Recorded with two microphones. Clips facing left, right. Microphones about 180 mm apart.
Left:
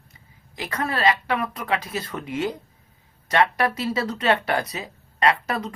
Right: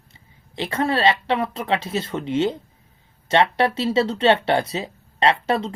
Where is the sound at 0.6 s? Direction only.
25° right (ahead or behind).